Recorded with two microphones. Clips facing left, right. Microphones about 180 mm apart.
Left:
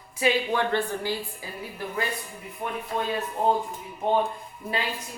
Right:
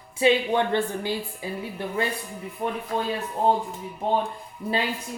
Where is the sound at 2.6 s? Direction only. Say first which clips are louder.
Right 4 dB; 30° right (ahead or behind).